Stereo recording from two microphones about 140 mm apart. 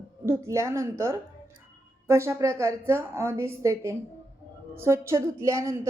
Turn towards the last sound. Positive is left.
turn(degrees=-20)  # may be behind; listen again after turning